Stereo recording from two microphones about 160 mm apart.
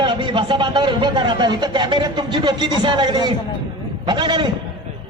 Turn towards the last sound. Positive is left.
turn(degrees=-30)  # may be behind; listen again after turning